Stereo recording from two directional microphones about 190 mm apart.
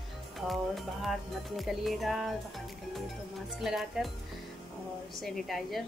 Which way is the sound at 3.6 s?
Centre (ahead or behind).